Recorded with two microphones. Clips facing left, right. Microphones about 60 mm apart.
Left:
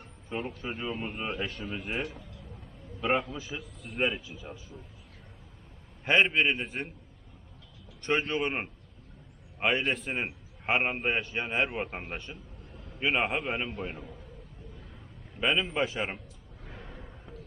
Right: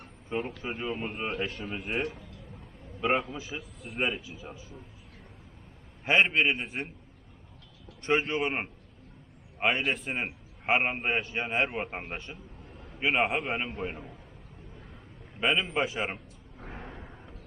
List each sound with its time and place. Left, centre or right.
0.3 s a man's voice: centre
6.1 s a man's voice: centre
8.0 s a man's voice: centre
15.4 s a man's voice: centre
16.6 s a sound: right
16.9 s a sound: centre